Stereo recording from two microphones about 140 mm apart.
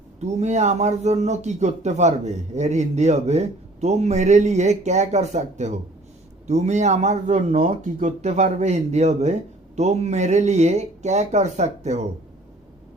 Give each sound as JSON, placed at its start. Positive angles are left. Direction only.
{"t": 0.2, "sound": "speech", "side_deg": -55}